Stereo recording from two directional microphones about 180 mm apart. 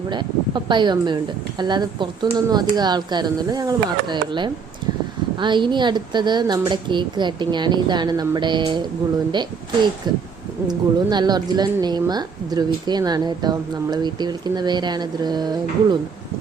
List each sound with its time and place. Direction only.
0.1 s speech: 25° right (ahead or behind)
10.0 s speech: 25° right (ahead or behind)